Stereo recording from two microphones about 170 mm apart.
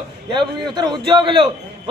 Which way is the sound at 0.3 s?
25° right (ahead or behind).